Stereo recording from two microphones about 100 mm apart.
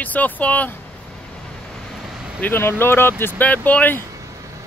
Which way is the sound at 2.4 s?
20° left (ahead or behind).